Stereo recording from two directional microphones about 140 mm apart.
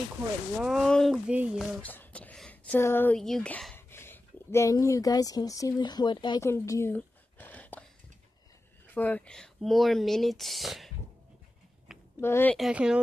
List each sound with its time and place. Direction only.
0.6 s speech: centre (ahead or behind)
1.8 s a sound: 10° left (ahead or behind)
3.2 s speech: centre (ahead or behind); by 6.4 s 30° left (ahead or behind)
6.4 s a sound: 20° left (ahead or behind)
8.8 s speech: 10° left (ahead or behind)
12.2 s speech: 15° left (ahead or behind)
12.5 s speech: 5° right (ahead or behind)